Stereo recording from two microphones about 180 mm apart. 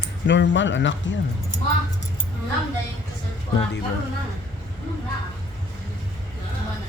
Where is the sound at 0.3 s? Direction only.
90° left.